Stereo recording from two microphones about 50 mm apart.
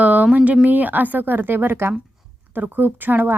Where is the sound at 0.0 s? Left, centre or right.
Right.